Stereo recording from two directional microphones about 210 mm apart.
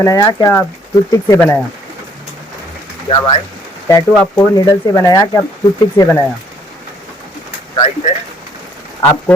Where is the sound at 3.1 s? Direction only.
20° left (ahead or behind).